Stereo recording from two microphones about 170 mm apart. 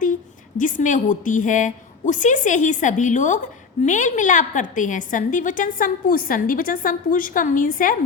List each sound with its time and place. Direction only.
0.0 s a woman's voice: 50° left (ahead or behind)